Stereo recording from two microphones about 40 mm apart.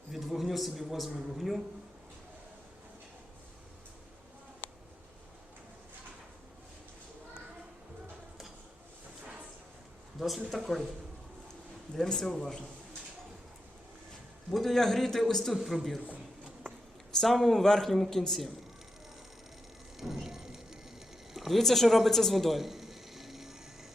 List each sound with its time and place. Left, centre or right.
0.1 s a man's voice: centre
10.2 s a man's voice: centre
12.0 s speech: centre
14.5 s speech: centre
15.5 s a man's voice: centre
17.2 s speech: centre
20.0 s a sound: centre
21.3 s a sound: centre
21.6 s speech: centre